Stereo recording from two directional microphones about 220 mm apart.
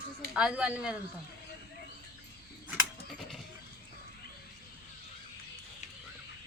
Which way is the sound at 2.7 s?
Centre (ahead or behind).